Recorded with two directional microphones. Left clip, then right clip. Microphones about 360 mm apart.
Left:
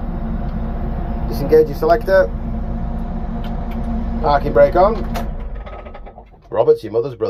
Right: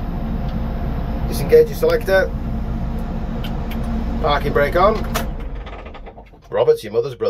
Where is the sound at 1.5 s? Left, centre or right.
Centre.